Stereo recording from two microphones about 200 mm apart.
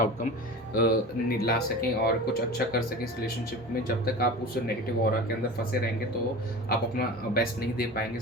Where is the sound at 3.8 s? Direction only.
50° left (ahead or behind).